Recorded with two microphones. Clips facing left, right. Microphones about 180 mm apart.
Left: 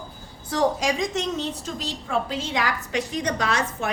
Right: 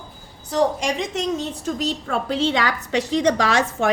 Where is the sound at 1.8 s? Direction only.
65° right (ahead or behind).